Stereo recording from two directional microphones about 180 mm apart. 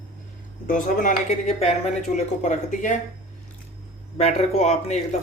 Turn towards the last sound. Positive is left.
turn(degrees=40)  # may be behind; listen again after turning